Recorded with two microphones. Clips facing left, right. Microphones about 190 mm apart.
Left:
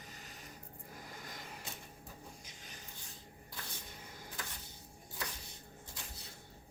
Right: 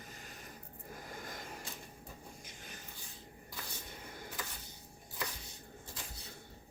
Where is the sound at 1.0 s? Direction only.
50° right (ahead or behind).